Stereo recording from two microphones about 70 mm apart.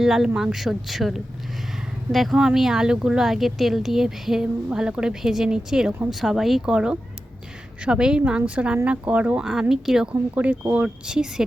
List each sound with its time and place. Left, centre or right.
0.0 s speech: centre
9.4 s speech: centre
10.1 s speech: right